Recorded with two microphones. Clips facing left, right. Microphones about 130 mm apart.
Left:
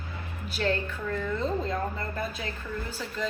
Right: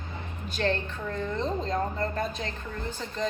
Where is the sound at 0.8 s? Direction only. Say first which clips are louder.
Left 1 dB; 20° right (ahead or behind).